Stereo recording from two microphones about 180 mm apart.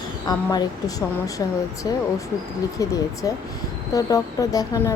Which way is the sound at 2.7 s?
20° left (ahead or behind).